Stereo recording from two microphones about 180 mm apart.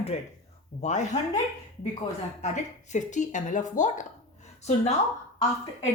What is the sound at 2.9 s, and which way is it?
A woman's voice, 45° left (ahead or behind).